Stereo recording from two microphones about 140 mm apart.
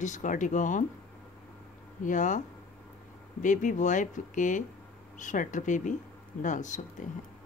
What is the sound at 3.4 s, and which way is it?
A woman's voice, 65° left (ahead or behind).